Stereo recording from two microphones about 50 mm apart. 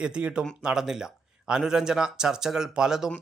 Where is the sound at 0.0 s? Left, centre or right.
Centre.